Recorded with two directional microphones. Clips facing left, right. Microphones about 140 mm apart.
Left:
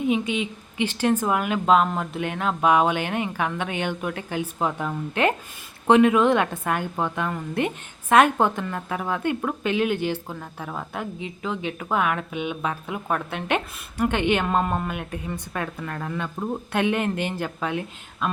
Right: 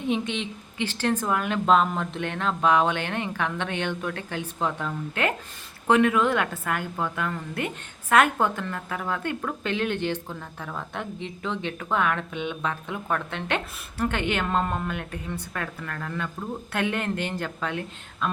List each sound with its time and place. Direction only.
0.1 s a woman's voice: 10° left (ahead or behind)